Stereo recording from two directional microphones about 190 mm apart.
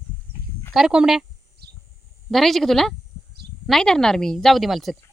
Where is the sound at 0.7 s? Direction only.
5° right (ahead or behind).